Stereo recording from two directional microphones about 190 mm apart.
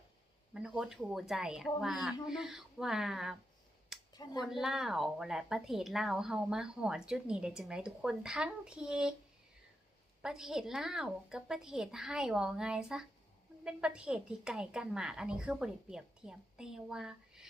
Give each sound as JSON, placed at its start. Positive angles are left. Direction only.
{"t": 0.5, "sound": "a woman's voice", "side_deg": -5}
{"t": 4.1, "sound": "speech", "side_deg": 20}
{"t": 4.6, "sound": "a woman's voice", "side_deg": 0}
{"t": 10.2, "sound": "a woman's voice", "side_deg": 0}